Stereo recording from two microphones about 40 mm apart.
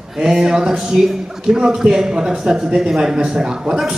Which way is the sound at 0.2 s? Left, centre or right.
Centre.